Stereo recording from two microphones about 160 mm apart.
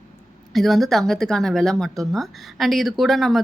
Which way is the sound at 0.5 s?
Centre (ahead or behind).